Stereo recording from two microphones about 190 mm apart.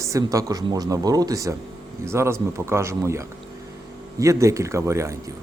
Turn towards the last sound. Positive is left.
turn(degrees=-15)  # may be behind; listen again after turning